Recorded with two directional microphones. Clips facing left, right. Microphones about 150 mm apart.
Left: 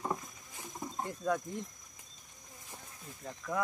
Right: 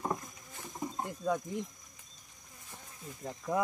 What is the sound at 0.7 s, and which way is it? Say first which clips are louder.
Cricket: right 2 dB; 5° right (ahead or behind).